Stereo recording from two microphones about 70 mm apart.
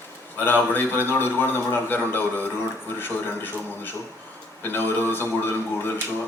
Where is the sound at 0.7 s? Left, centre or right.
Left.